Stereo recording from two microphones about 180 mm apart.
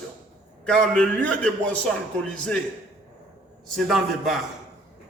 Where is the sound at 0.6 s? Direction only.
5° left (ahead or behind).